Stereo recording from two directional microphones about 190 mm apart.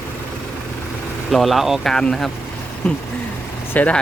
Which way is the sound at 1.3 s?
Centre (ahead or behind).